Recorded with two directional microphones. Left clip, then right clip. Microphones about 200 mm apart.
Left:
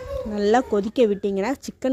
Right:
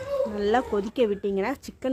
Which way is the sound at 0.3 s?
25° left (ahead or behind).